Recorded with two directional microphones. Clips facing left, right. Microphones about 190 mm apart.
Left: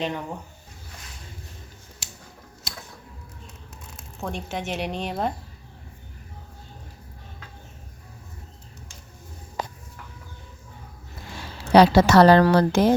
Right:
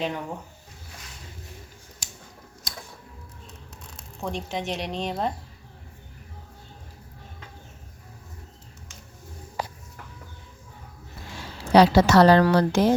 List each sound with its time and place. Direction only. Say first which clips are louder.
0.0 s speech: left 1 dB; 5° right (ahead or behind)
3.9 s speech: right 1 dB; centre (ahead or behind)
11.7 s a woman's voice: left 1 dB; 55° left (ahead or behind)